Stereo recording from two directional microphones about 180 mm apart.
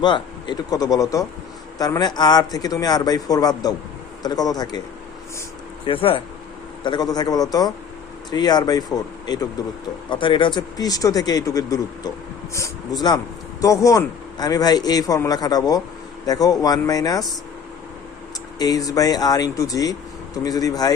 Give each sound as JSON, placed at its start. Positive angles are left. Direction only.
{"t": 0.0, "sound": "a man's voice", "side_deg": 25}
{"t": 5.8, "sound": "a man's voice", "side_deg": 30}
{"t": 18.6, "sound": "a man's voice", "side_deg": 20}